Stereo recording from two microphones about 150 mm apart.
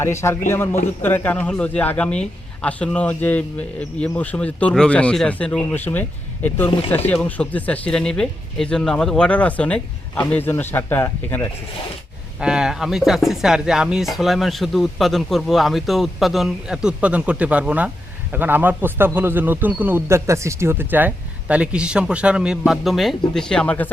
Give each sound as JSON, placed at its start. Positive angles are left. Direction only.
{"t": 0.0, "sound": "a man's voice", "side_deg": 20}
{"t": 12.4, "sound": "speech", "side_deg": -5}